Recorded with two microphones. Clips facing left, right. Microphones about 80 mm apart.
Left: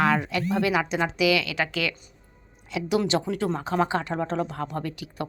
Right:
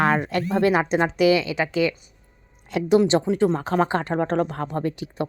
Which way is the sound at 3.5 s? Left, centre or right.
Right.